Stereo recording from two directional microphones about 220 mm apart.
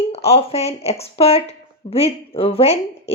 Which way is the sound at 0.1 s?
25° left (ahead or behind).